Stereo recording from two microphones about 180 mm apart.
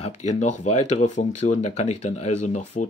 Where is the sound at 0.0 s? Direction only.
40° left (ahead or behind).